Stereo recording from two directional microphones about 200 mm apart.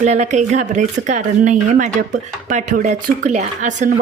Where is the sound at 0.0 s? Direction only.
35° right (ahead or behind).